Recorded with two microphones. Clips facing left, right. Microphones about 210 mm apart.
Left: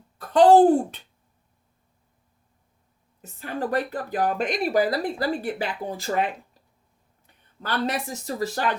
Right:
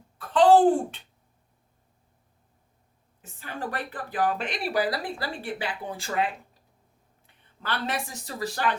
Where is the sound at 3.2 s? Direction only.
40° left (ahead or behind).